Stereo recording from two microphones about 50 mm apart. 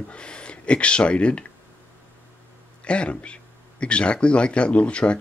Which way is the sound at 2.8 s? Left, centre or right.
Left.